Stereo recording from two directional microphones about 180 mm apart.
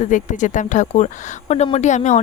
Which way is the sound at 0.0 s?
45° left (ahead or behind).